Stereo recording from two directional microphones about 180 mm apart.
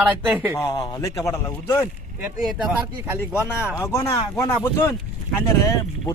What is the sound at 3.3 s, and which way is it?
Speech, 15° left (ahead or behind).